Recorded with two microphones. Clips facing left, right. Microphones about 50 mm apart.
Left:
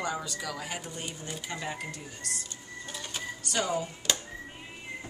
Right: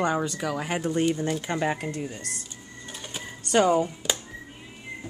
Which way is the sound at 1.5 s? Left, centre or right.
Right.